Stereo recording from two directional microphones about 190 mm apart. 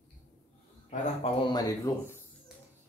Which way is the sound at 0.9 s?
40° left (ahead or behind).